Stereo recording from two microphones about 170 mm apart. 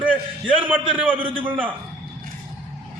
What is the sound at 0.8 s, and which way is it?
Speech, 30° right (ahead or behind).